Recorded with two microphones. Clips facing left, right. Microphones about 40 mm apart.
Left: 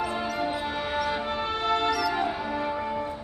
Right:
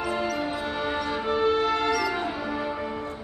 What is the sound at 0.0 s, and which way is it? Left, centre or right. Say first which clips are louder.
Music: right 1 dB; centre.